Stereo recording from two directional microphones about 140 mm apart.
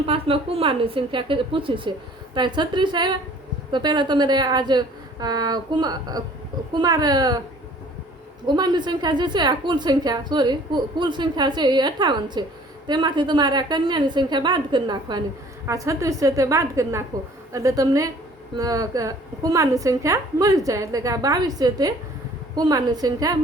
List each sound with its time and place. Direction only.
0.0 s a woman's voice: 40° right (ahead or behind)
8.4 s a woman's voice: 30° right (ahead or behind)